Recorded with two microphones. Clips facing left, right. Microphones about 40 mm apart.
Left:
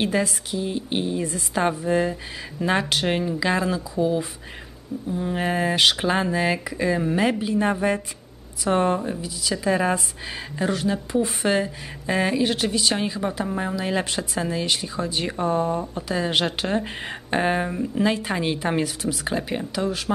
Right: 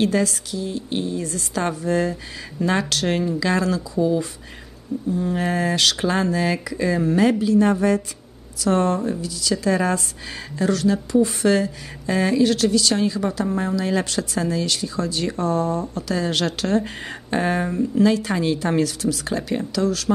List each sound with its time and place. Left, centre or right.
0.0 s speech: centre